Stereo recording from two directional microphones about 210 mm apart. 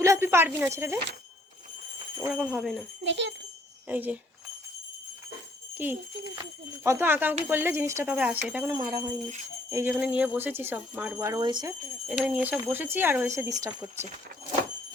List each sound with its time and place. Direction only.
0.0 s speech: 15° right (ahead or behind)
2.3 s speech: 5° right (ahead or behind)
3.0 s speech: 60° right (ahead or behind)
3.8 s speech: 5° right (ahead or behind)
5.7 s speech: 10° right (ahead or behind)
8.7 s speech: 20° right (ahead or behind)
9.6 s jingle bell: 15° right (ahead or behind)
9.9 s speech: 5° right (ahead or behind); by 11.7 s 20° right (ahead or behind)
12.0 s speech: 5° right (ahead or behind)